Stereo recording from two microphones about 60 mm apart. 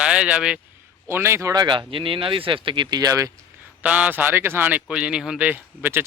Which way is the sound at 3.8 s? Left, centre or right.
Right.